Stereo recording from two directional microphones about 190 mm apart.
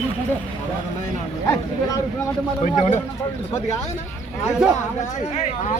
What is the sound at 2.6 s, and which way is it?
Speech, 40° left (ahead or behind).